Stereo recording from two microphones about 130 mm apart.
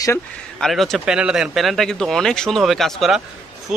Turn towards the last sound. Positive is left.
turn(degrees=0)  # may be behind; listen again after turning